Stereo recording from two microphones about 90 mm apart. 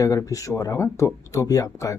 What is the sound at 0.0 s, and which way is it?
Speech, 40° left (ahead or behind).